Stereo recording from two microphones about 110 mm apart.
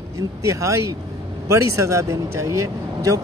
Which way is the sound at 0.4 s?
30° right (ahead or behind).